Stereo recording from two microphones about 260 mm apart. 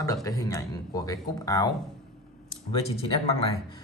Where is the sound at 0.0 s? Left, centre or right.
Centre.